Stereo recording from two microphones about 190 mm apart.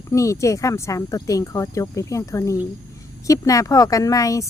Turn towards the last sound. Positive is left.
turn(degrees=15)  # may be behind; listen again after turning